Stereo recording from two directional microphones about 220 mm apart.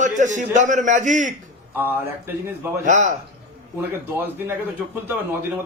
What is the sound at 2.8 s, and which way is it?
Speech, 35° right (ahead or behind).